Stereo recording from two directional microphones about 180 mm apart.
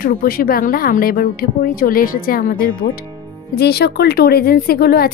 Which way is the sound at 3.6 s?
65° left (ahead or behind).